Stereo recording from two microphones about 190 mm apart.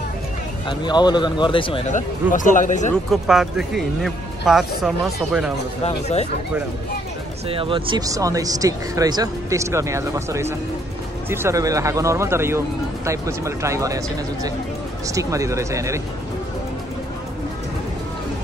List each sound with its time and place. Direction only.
0.7 s speech: 25° left (ahead or behind)
1.9 s speech: 40° left (ahead or behind)
3.1 s speech: centre (ahead or behind)
5.9 s speech: 35° left (ahead or behind)
7.4 s speech: 30° right (ahead or behind)